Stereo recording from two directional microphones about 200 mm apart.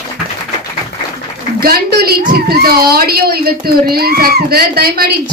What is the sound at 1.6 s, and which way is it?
Speech, 50° right (ahead or behind).